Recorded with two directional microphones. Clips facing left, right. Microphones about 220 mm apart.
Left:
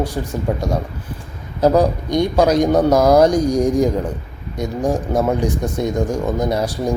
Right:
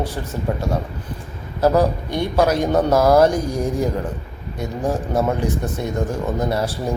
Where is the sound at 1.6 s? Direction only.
15° left (ahead or behind).